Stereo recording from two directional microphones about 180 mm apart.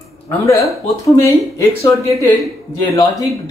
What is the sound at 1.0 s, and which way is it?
A woman's voice, 15° left (ahead or behind).